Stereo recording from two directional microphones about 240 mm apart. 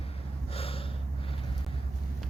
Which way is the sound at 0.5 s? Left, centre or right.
Left.